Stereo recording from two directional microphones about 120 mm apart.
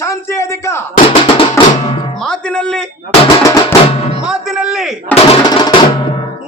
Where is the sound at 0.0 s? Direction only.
25° left (ahead or behind).